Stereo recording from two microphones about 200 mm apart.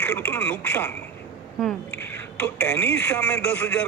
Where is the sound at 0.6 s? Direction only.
10° left (ahead or behind).